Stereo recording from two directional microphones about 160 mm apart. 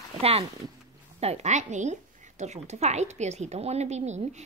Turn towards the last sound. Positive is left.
turn(degrees=-45)  # may be behind; listen again after turning